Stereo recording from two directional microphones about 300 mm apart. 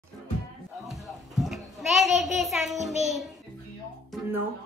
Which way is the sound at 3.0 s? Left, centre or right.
Centre.